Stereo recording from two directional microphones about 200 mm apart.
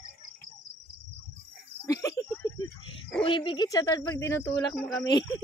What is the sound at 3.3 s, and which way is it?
Speech, 25° left (ahead or behind).